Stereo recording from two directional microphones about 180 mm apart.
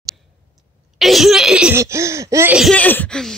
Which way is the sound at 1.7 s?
15° right (ahead or behind).